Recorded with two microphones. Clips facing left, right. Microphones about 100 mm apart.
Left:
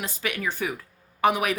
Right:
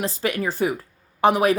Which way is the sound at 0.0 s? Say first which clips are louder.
Right 6 dB; 35° right (ahead or behind).